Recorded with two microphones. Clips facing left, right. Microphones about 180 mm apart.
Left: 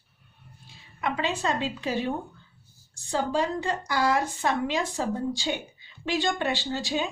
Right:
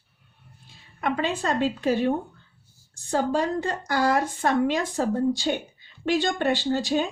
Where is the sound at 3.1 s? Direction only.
55° right (ahead or behind).